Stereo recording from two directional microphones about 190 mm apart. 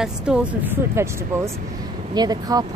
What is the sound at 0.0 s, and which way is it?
A woman's voice, 5° right (ahead or behind).